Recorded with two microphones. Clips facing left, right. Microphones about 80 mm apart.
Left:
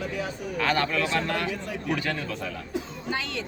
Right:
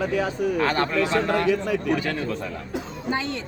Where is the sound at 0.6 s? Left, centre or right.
Right.